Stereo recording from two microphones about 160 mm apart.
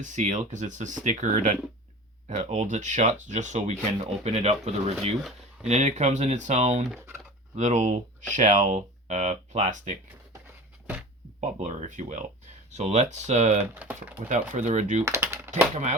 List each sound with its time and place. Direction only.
0.0 s speech: 50° right (ahead or behind)
11.3 s speech: 45° right (ahead or behind)
13.7 s speech: 10° right (ahead or behind)
14.3 s speech: 50° right (ahead or behind)
15.0 s speech: 15° right (ahead or behind)
15.7 s speech: 45° right (ahead or behind)